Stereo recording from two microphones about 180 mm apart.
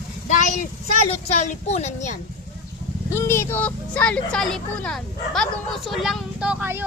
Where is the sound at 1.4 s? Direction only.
40° left (ahead or behind).